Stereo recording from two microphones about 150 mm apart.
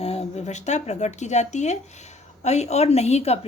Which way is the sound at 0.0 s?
45° left (ahead or behind).